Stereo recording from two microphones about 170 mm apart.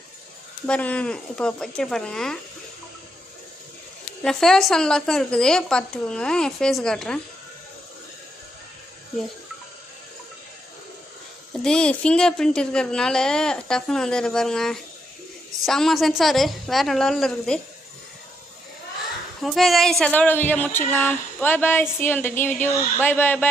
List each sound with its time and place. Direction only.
0.7 s a woman's voice: 10° left (ahead or behind)
4.2 s a woman's voice: centre (ahead or behind)
11.6 s a woman's voice: 5° left (ahead or behind)
19.4 s speech: centre (ahead or behind)